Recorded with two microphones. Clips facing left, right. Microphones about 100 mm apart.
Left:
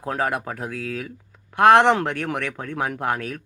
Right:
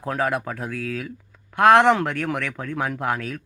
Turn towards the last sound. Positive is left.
turn(degrees=25)  # may be behind; listen again after turning